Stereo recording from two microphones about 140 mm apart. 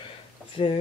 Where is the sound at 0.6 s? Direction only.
45° left (ahead or behind).